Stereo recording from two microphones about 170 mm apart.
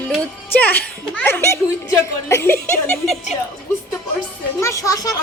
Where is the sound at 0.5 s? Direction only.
10° left (ahead or behind).